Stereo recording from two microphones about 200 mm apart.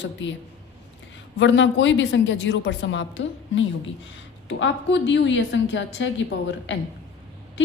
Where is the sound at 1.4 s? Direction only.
65° left (ahead or behind).